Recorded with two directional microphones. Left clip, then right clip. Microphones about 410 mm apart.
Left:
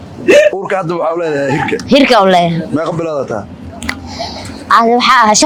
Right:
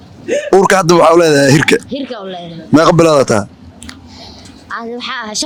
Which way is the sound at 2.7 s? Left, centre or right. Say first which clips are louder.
Right 13 dB; right.